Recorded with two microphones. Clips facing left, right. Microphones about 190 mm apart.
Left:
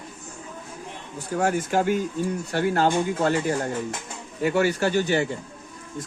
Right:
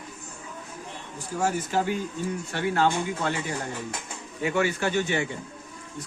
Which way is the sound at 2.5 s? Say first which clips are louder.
Left 2 dB; 40° left (ahead or behind).